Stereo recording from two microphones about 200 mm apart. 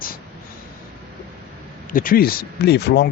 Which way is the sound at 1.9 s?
45° left (ahead or behind).